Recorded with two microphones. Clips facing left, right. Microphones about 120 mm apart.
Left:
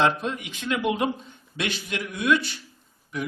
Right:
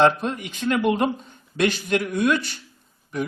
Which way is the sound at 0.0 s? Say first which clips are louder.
Right 4 dB; 45° right (ahead or behind).